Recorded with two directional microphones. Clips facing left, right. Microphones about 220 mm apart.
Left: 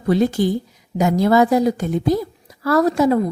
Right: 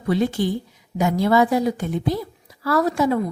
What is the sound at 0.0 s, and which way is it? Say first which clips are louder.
A woman's voice: left 4 dB; 40° left (ahead or behind).